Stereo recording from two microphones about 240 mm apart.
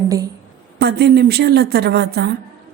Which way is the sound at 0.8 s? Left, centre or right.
Right.